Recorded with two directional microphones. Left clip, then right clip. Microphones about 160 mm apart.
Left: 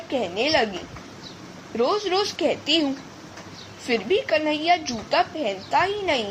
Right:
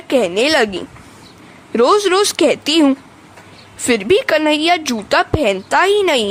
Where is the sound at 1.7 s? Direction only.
65° right (ahead or behind).